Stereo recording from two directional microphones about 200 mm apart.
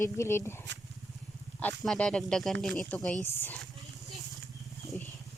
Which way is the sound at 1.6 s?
5° left (ahead or behind).